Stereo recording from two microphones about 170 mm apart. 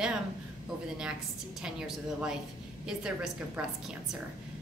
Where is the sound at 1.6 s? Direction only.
5° right (ahead or behind).